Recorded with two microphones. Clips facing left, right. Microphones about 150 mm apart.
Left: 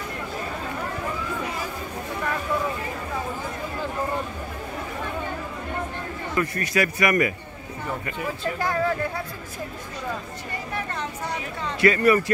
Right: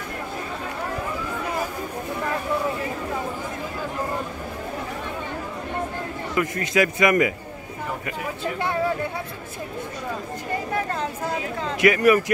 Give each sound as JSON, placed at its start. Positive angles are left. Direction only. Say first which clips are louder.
{"t": 6.3, "sound": "a man's voice", "louder": "right 2 dB", "side_deg": -20}
{"t": 11.8, "sound": "speech", "louder": "right 1 dB", "side_deg": -15}